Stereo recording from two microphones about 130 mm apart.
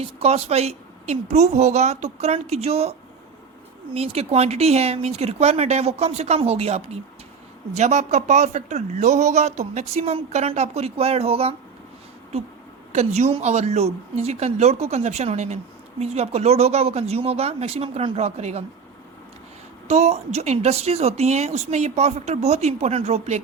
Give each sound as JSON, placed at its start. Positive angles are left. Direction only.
{"t": 0.0, "sound": "speech", "side_deg": -55}
{"t": 3.9, "sound": "speech", "side_deg": -50}
{"t": 12.9, "sound": "speech", "side_deg": -60}
{"t": 19.9, "sound": "speech", "side_deg": -55}